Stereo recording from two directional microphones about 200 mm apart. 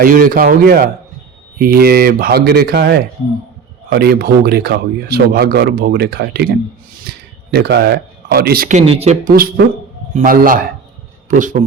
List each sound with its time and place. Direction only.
0.0 s speech: 45° right (ahead or behind)
8.9 s speech: 35° right (ahead or behind)
9.3 s speech: 50° right (ahead or behind)